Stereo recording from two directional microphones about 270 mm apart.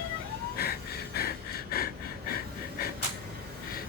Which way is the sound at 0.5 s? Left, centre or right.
Left.